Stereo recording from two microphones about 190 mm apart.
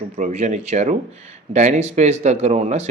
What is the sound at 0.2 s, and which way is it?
Speech, 35° right (ahead or behind).